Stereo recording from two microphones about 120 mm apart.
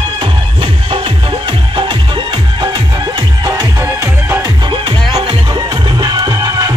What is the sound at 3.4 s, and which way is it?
Music, 35° right (ahead or behind).